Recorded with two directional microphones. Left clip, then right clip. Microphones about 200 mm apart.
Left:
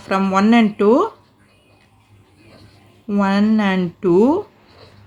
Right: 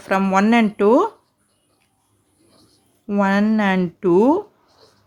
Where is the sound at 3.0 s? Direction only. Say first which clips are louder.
Even; 30° right (ahead or behind).